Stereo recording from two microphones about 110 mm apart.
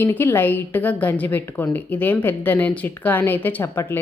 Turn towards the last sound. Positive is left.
turn(degrees=20)  # may be behind; listen again after turning